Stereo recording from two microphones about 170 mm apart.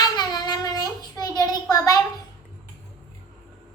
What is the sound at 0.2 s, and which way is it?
Child singing, 25° left (ahead or behind).